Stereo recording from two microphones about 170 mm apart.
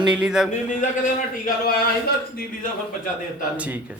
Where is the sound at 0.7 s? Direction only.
45° left (ahead or behind).